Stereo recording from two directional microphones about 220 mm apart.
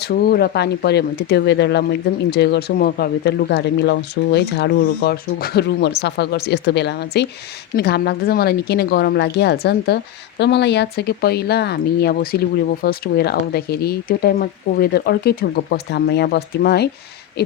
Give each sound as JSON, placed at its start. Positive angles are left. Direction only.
{"t": 0.0, "sound": "speech", "side_deg": 45}